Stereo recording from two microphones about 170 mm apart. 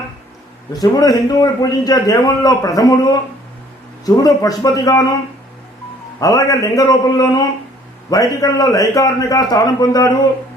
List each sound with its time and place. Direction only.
0.7 s a man's voice: 20° left (ahead or behind)
6.1 s a man's voice: 20° left (ahead or behind)